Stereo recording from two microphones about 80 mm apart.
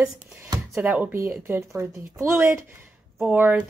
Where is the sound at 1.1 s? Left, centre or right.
Right.